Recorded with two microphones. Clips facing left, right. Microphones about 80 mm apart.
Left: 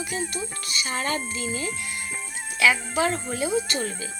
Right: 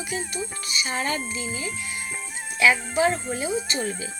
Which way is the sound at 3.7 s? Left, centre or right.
Right.